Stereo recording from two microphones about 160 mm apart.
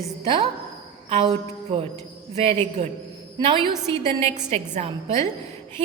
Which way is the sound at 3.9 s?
40° right (ahead or behind).